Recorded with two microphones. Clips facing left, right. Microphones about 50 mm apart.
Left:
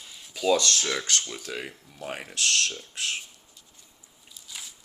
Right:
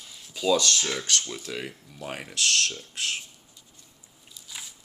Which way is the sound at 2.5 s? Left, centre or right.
Left.